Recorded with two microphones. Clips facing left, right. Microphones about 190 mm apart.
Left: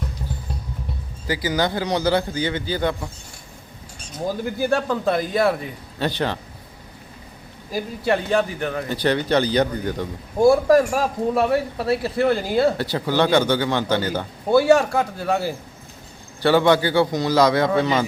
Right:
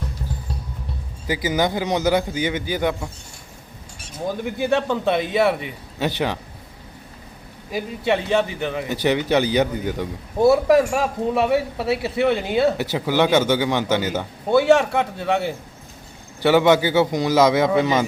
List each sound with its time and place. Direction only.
1.3 s a man's voice: 20° right (ahead or behind)
4.3 s a man's voice: centre (ahead or behind)
6.0 s a man's voice: 15° right (ahead or behind)
7.7 s a man's voice: centre (ahead or behind)
12.7 s a man's voice: 15° right (ahead or behind)
14.5 s a man's voice: centre (ahead or behind)
16.4 s a man's voice: 15° right (ahead or behind)